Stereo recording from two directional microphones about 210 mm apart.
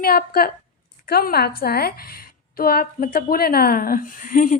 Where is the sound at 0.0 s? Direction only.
45° left (ahead or behind).